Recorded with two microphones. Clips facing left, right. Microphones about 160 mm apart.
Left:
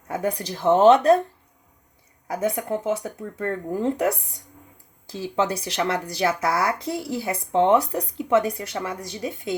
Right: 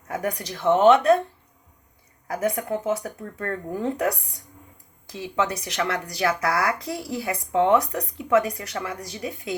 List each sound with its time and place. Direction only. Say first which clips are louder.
0.1 s speech: left 2 dB; 25° left (ahead or behind)
2.3 s speech: left 1 dB; 25° left (ahead or behind)